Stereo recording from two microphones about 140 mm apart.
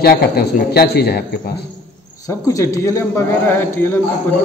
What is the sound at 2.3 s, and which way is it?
A man's voice, 25° left (ahead or behind).